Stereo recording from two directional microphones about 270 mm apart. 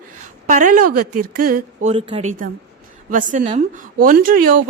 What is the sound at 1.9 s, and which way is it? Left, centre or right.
A woman's voice, right.